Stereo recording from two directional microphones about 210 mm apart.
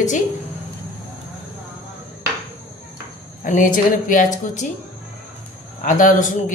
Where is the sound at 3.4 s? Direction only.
40° left (ahead or behind).